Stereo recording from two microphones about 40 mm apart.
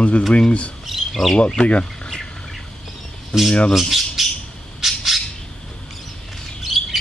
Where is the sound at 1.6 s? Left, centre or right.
Left.